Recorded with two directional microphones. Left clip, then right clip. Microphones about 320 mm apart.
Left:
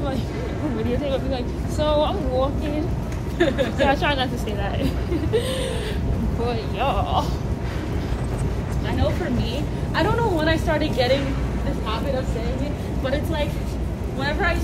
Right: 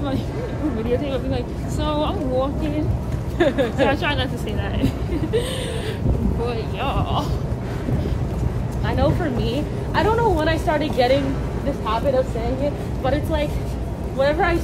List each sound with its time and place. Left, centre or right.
0.8 s speech: centre
3.3 s a woman's voice: centre
3.8 s speech: centre
6.4 s speech: centre
9.5 s a woman's voice: centre
13.0 s a woman's voice: centre